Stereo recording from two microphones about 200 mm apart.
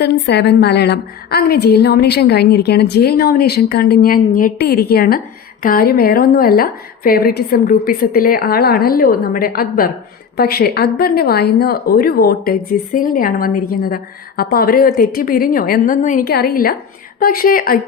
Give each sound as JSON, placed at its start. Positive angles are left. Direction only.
{"t": 0.0, "sound": "speech", "side_deg": 55}